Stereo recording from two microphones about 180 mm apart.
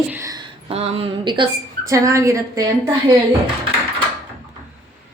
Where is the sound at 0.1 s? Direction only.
15° right (ahead or behind).